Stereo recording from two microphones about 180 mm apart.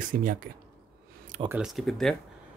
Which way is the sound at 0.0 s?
50° right (ahead or behind).